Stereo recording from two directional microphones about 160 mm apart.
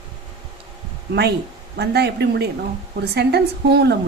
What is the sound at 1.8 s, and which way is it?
A woman's voice, 90° right.